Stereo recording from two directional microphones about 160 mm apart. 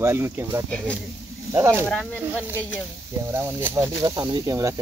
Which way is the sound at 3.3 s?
15° right (ahead or behind).